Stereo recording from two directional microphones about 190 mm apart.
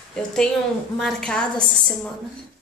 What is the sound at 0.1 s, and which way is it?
A woman's voice, 5° left (ahead or behind).